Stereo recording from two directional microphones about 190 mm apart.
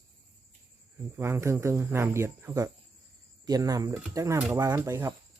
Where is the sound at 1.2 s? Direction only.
15° right (ahead or behind).